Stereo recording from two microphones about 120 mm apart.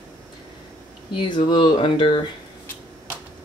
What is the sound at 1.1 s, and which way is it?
Speech, 40° left (ahead or behind).